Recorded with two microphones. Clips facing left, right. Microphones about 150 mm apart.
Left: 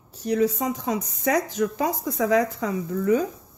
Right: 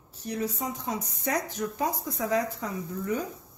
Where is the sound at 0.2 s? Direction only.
90° left.